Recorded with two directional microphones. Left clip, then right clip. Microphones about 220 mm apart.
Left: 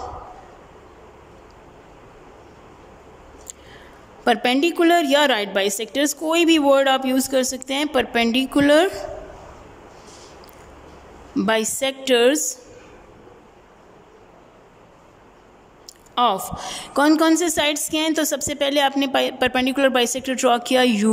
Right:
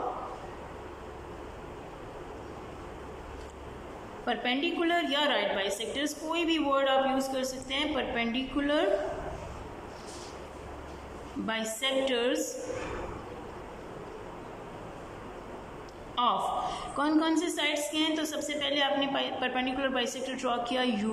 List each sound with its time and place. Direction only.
4.3 s a woman's voice: 50° left (ahead or behind)
11.4 s a woman's voice: 50° left (ahead or behind)
16.2 s a woman's voice: 50° left (ahead or behind)